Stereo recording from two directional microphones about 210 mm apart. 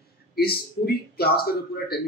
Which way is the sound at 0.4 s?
45° left (ahead or behind).